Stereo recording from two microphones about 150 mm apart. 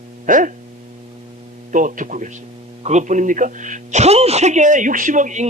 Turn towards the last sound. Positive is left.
turn(degrees=-55)  # may be behind; listen again after turning